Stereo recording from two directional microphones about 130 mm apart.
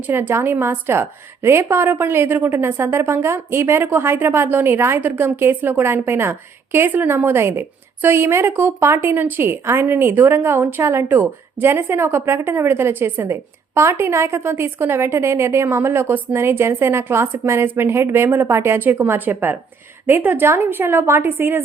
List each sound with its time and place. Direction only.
0.1 s a woman's voice: 15° right (ahead or behind)